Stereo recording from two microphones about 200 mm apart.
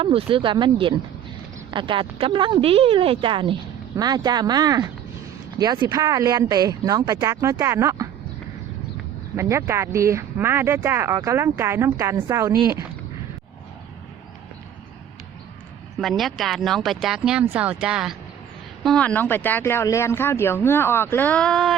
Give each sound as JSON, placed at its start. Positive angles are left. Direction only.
{"t": 0.0, "sound": "speech", "side_deg": -25}
{"t": 9.3, "sound": "speech", "side_deg": -15}
{"t": 16.0, "sound": "speech", "side_deg": 0}